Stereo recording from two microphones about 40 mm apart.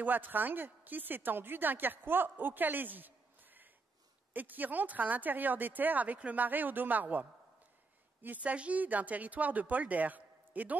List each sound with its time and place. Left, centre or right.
0.0 s a woman's voice: right
8.4 s speech: right